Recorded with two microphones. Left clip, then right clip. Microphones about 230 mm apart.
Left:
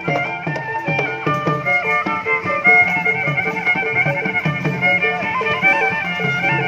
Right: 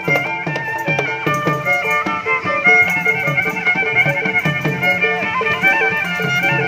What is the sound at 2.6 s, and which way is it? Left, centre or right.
Music, right.